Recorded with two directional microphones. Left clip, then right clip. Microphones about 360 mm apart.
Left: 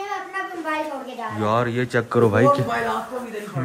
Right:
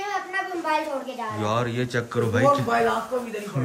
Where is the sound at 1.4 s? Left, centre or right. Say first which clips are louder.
Left 5 dB; centre.